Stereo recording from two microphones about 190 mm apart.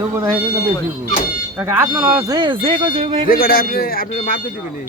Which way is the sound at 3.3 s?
50° left (ahead or behind).